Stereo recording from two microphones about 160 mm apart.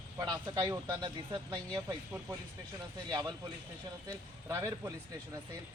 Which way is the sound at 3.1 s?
25° right (ahead or behind).